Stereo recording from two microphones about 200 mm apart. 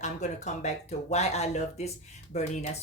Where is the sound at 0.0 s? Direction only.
35° left (ahead or behind).